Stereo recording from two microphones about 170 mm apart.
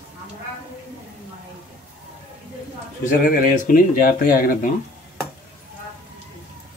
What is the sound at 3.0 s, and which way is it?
Speech, 50° left (ahead or behind).